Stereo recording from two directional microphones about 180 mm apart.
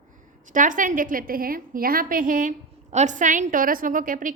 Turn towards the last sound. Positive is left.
turn(degrees=-50)  # may be behind; listen again after turning